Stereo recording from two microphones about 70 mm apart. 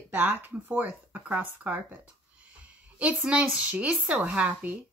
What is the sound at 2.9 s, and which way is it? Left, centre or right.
A woman's voice, centre.